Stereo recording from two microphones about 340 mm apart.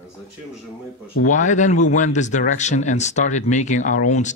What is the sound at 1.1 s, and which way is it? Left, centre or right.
Speech, left.